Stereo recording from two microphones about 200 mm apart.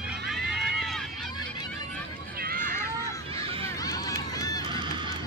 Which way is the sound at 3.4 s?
30° right (ahead or behind).